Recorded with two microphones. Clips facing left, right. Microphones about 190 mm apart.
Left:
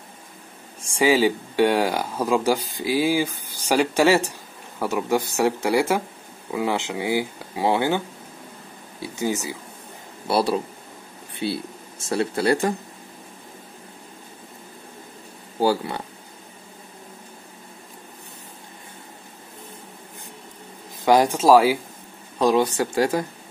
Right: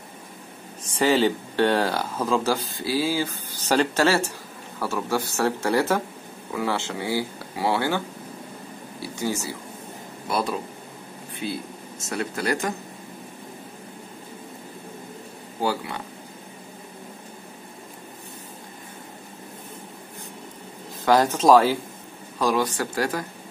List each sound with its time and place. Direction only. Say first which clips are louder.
0.9 s speech: left 2 dB; 10° left (ahead or behind)
9.0 s speech: left 2 dB; 20° left (ahead or behind)
10.2 s speech: left 5 dB; 35° left (ahead or behind)
15.6 s speech: left 5 dB; 35° left (ahead or behind)
21.0 s speech: left 2 dB; 15° left (ahead or behind)
22.4 s speech: left 4 dB; 25° left (ahead or behind)